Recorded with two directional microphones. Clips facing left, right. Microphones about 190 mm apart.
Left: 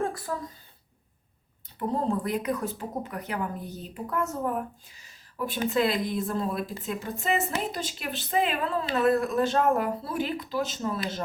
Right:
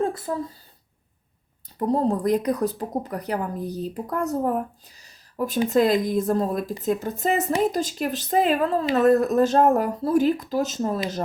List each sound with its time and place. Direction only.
0.0 s speech: 25° right (ahead or behind)
1.9 s a woman's voice: 40° right (ahead or behind)